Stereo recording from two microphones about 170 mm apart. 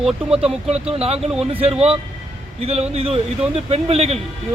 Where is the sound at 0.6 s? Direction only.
35° right (ahead or behind).